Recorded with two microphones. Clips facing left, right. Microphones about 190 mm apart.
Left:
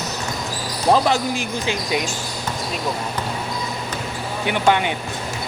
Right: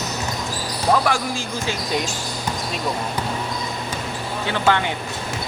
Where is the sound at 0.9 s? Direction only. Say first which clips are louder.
Left 3 dB; 20° left (ahead or behind).